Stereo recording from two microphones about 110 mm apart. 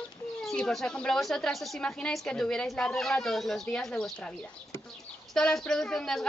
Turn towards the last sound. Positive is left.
turn(degrees=5)  # may be behind; listen again after turning